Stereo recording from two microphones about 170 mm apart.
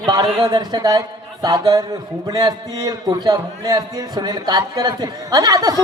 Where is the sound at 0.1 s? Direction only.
20° right (ahead or behind).